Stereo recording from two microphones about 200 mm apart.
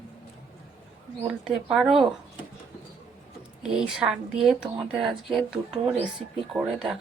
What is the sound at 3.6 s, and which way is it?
A woman's voice, 5° right (ahead or behind).